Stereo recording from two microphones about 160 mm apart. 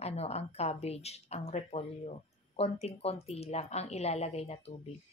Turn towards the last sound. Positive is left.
turn(degrees=40)  # may be behind; listen again after turning